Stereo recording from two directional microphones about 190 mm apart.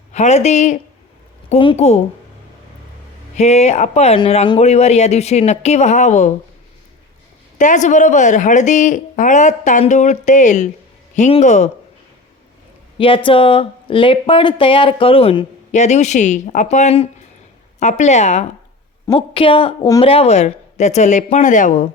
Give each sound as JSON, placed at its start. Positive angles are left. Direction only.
{"t": 0.1, "sound": "speech", "side_deg": 35}
{"t": 3.3, "sound": "speech", "side_deg": 35}
{"t": 7.6, "sound": "speech", "side_deg": 40}
{"t": 13.0, "sound": "speech", "side_deg": 25}